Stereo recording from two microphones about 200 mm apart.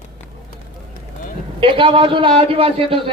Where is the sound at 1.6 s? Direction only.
25° right (ahead or behind).